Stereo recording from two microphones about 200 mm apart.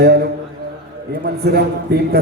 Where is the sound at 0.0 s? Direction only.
55° right (ahead or behind).